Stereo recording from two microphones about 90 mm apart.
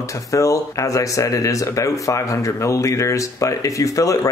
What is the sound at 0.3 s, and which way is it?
Speech, 35° left (ahead or behind).